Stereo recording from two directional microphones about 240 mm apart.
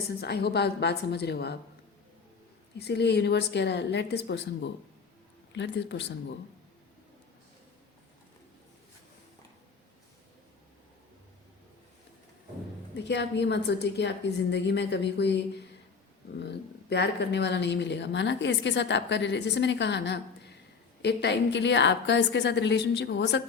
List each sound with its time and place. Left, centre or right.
0.2 s speech: left
2.7 s speech: left
13.0 s speech: left